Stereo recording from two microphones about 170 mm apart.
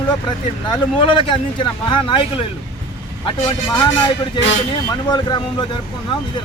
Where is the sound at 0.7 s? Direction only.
30° left (ahead or behind).